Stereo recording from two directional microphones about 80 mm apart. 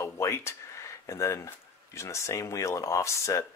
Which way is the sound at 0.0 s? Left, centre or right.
Left.